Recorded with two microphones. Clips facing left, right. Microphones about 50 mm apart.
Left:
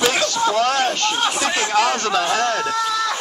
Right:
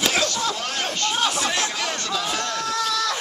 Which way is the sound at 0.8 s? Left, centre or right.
Left.